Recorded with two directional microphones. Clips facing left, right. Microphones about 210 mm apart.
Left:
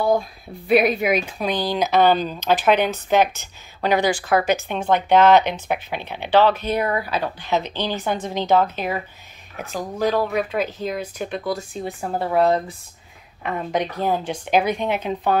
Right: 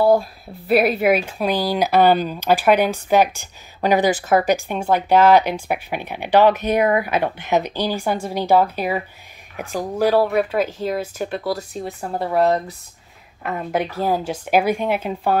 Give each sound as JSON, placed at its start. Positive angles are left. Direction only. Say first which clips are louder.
{"t": 0.0, "sound": "speech", "louder": "right 4 dB", "side_deg": -5}
{"t": 3.8, "sound": "speech", "louder": "right 2 dB", "side_deg": -40}
{"t": 4.1, "sound": "speech", "louder": "right 2 dB", "side_deg": -20}
{"t": 4.6, "sound": "speech", "louder": "right 1 dB", "side_deg": -10}